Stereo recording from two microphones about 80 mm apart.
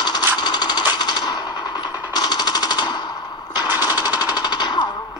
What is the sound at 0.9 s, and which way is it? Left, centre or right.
Machine gun, left.